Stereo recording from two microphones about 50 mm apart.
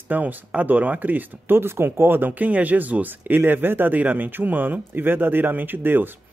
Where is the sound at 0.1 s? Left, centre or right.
Right.